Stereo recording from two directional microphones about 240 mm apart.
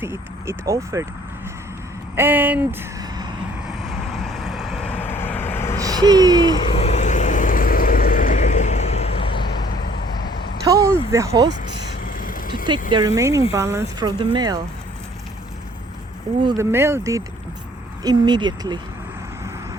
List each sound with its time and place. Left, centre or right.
0.0 s speech: centre
2.1 s speech: centre
3.8 s vehicle: centre
5.8 s speech: centre
6.5 s vehicle: left
9.4 s vehicle: left
10.7 s speech: centre
12.0 s vehicle: left
13.1 s speech: centre
16.4 s speech: centre